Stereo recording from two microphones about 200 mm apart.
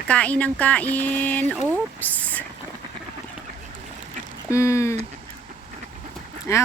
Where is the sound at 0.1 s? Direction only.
5° left (ahead or behind).